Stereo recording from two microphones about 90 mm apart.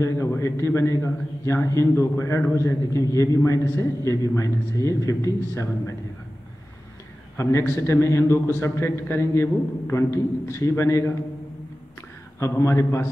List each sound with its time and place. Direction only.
0.0 s a man's voice: 35° left (ahead or behind)
7.3 s a man's voice: 30° left (ahead or behind)
12.4 s a man's voice: 35° left (ahead or behind)